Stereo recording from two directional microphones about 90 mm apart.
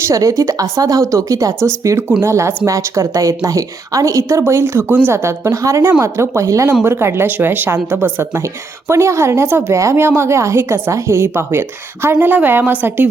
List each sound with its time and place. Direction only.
0.1 s a woman's voice: 40° right (ahead or behind); by 13.1 s 20° right (ahead or behind)